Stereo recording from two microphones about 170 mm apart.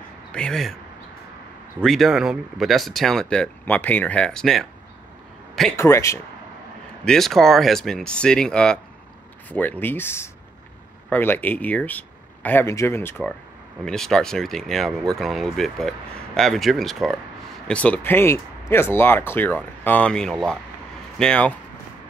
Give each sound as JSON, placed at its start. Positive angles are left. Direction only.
{"t": 0.3, "sound": "speech", "side_deg": 5}
{"t": 1.8, "sound": "speech", "side_deg": 0}
{"t": 5.8, "sound": "speech", "side_deg": 15}
{"t": 7.1, "sound": "speech", "side_deg": 0}
{"t": 13.8, "sound": "speech", "side_deg": 5}